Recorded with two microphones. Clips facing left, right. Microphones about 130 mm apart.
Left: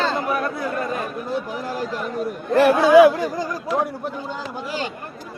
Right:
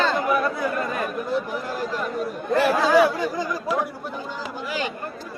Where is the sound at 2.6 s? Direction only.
60° left (ahead or behind).